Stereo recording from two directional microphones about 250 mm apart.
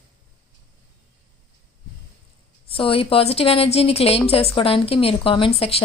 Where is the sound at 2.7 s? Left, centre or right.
Left.